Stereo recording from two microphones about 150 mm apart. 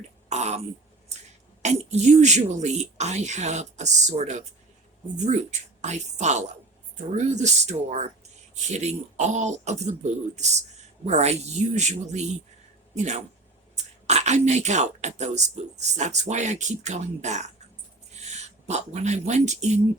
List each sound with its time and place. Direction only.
0.3 s throat clearing: 50° right (ahead or behind)
1.6 s speech: 50° right (ahead or behind)